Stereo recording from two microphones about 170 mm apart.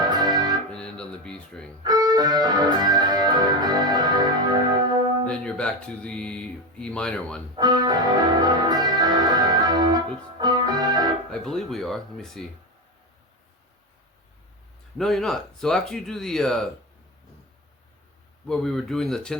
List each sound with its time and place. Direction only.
0.0 s music: 25° right (ahead or behind)
0.7 s music: 5° left (ahead or behind)
1.8 s music: 25° right (ahead or behind)
5.2 s speech: 5° left (ahead or behind)
7.5 s music: 25° right (ahead or behind)
11.3 s speech: 5° left (ahead or behind)
14.9 s speech: centre (ahead or behind)
18.4 s speech: 5° left (ahead or behind)